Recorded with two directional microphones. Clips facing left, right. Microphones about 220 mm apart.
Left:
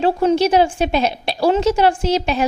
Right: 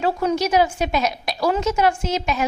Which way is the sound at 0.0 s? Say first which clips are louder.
Left 5 dB; 30° left (ahead or behind).